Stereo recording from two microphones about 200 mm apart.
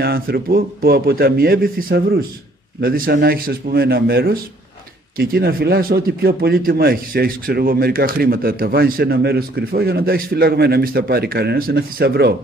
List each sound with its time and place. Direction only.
0.0 s speech: 50° right (ahead or behind)